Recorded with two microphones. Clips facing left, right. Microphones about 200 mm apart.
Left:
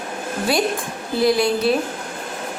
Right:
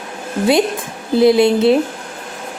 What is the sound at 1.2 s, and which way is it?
Speech, 25° right (ahead or behind).